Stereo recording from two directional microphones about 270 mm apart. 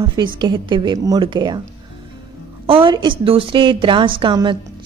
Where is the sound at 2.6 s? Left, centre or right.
Centre.